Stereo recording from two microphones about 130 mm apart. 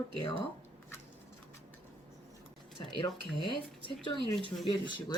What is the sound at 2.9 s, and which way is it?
Speech, 40° left (ahead or behind).